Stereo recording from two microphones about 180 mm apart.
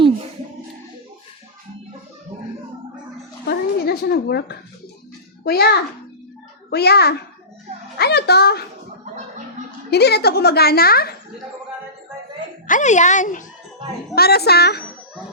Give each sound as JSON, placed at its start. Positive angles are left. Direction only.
{"t": 3.4, "sound": "a sound", "side_deg": 65}
{"t": 6.7, "sound": "a woman's voice", "side_deg": 65}
{"t": 9.9, "sound": "a woman's voice", "side_deg": 65}
{"t": 12.6, "sound": "speech", "side_deg": 45}
{"t": 14.2, "sound": "a woman's voice", "side_deg": 60}